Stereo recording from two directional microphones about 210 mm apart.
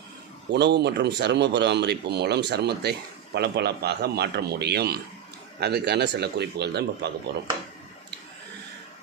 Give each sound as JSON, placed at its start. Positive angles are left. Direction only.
{"t": 0.5, "sound": "speech", "side_deg": -55}